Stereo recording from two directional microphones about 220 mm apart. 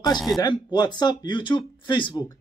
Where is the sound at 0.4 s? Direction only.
20° left (ahead or behind).